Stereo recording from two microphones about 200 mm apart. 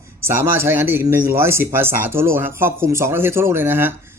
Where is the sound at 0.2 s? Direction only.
10° right (ahead or behind).